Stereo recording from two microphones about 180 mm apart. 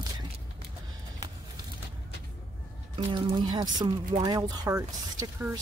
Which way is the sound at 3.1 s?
25° right (ahead or behind).